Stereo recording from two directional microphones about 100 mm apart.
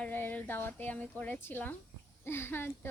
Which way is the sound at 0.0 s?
20° left (ahead or behind).